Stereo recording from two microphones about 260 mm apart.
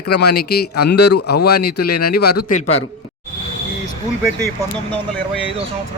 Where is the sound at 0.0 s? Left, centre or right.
Left.